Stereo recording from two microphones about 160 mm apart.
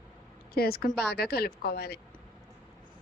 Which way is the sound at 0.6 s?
70° left (ahead or behind).